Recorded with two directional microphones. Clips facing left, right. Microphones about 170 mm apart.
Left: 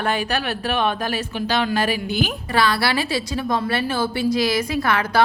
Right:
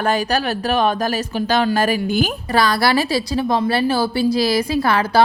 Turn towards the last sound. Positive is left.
turn(degrees=-30)  # may be behind; listen again after turning